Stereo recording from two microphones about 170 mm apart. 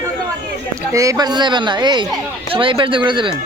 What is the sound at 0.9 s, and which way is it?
Speech, 20° right (ahead or behind).